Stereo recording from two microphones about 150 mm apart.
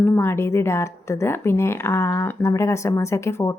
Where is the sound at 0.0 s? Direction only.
15° left (ahead or behind).